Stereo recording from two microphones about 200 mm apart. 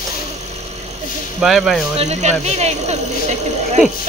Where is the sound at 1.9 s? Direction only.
35° right (ahead or behind).